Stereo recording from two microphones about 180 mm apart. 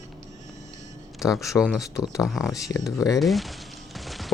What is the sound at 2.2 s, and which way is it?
Speech, centre (ahead or behind).